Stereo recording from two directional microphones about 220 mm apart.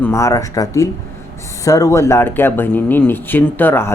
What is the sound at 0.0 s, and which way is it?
Speech, 10° left (ahead or behind).